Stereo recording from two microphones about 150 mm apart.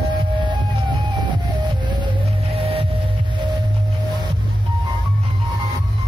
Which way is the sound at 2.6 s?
40° right (ahead or behind).